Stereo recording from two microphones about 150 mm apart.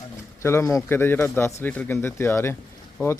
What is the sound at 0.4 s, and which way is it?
Speech, 20° left (ahead or behind).